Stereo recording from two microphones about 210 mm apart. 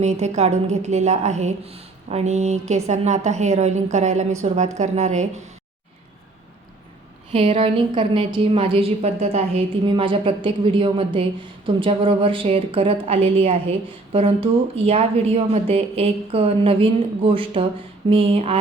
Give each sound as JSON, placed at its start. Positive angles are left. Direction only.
{"t": 0.0, "sound": "a woman's voice", "side_deg": -30}
{"t": 7.3, "sound": "a woman's voice", "side_deg": -30}